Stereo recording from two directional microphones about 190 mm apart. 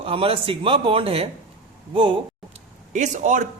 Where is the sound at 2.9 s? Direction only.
40° right (ahead or behind).